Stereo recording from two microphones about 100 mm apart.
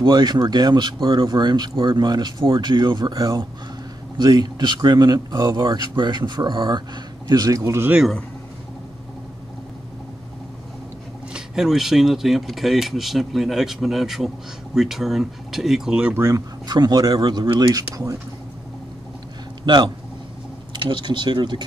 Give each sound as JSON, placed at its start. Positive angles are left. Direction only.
{"t": 0.0, "sound": "speech", "side_deg": -45}
{"t": 11.3, "sound": "speech", "side_deg": -5}
{"t": 16.2, "sound": "speech", "side_deg": -30}
{"t": 16.6, "sound": "speech", "side_deg": -45}
{"t": 17.6, "sound": "speech", "side_deg": -35}
{"t": 19.6, "sound": "a man's voice", "side_deg": -50}